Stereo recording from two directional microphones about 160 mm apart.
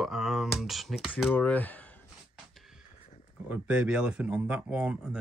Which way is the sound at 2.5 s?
Centre (ahead or behind).